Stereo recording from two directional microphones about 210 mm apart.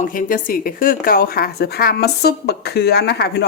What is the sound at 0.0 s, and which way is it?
A woman's voice, 40° left (ahead or behind).